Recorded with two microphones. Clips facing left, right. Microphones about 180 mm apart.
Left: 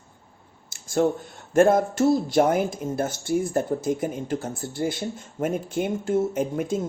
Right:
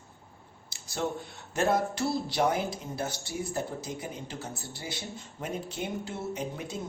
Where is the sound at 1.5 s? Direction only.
50° left (ahead or behind).